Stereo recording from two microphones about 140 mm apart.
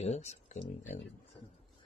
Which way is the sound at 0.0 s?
50° left (ahead or behind).